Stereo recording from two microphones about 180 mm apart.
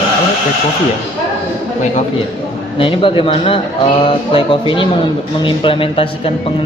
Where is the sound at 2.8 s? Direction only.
30° left (ahead or behind).